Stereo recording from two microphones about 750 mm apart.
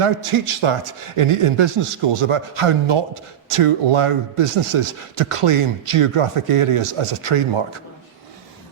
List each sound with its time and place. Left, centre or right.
0.0 s speech: right